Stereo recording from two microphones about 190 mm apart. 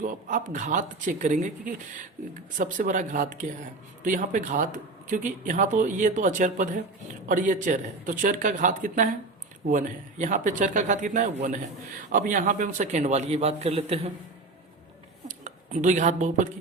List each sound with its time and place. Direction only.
0.0 s a man's voice: 45° right (ahead or behind)
15.3 s speech: 40° right (ahead or behind)